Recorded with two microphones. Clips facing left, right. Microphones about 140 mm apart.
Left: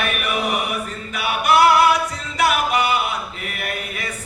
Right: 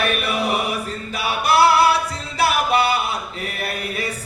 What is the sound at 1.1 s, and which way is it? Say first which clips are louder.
Singing: left 1 dB; 35° right (ahead or behind).